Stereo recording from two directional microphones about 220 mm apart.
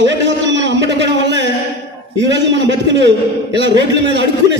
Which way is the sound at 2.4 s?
55° right (ahead or behind).